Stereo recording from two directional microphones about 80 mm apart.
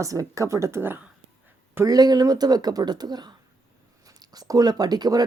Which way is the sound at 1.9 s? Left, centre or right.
Right.